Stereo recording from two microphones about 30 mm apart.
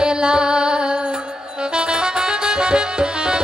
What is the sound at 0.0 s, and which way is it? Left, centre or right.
Music, right.